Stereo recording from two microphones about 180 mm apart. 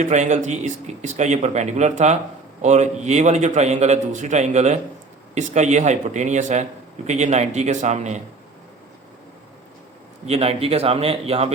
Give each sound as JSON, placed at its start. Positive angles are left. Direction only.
{"t": 0.0, "sound": "a man's voice", "side_deg": -40}
{"t": 10.2, "sound": "a man's voice", "side_deg": -35}